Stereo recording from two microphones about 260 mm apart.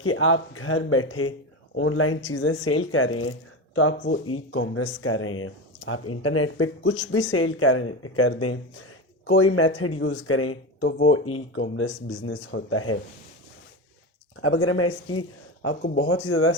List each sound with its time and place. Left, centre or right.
0.0 s speech: left
14.4 s speech: left